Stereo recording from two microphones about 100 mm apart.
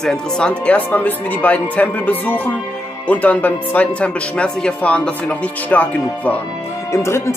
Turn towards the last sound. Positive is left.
turn(degrees=30)  # may be behind; listen again after turning